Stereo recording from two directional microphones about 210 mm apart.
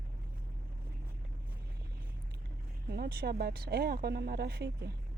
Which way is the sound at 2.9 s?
45° right (ahead or behind).